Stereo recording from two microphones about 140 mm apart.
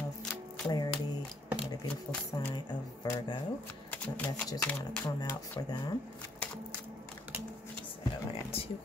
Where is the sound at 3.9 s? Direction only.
10° left (ahead or behind).